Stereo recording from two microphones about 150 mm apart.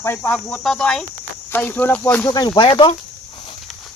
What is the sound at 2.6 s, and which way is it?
Speech, 35° left (ahead or behind).